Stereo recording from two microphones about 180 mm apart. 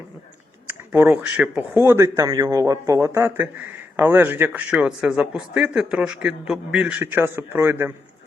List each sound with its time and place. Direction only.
0.7 s a man's voice: 10° right (ahead or behind)